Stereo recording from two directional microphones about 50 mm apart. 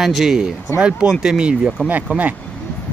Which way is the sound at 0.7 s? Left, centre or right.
Centre.